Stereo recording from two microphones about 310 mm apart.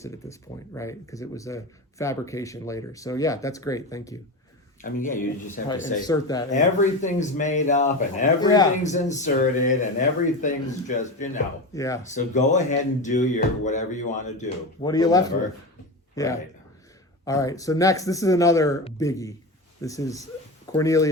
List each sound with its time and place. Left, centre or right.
0.0 s speech: centre
4.8 s speech: left
5.5 s speech: centre
5.8 s speech: left
6.1 s speech: centre
6.5 s speech: left
11.7 s speech: centre
12.1 s speech: left
14.8 s speech: centre